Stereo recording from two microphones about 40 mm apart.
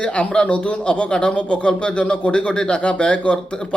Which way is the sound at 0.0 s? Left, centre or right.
Left.